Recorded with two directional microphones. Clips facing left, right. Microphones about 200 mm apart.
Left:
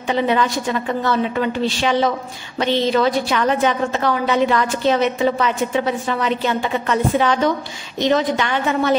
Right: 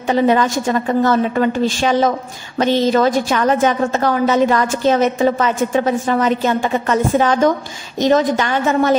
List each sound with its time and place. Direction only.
0.1 s a woman's voice: 45° right (ahead or behind)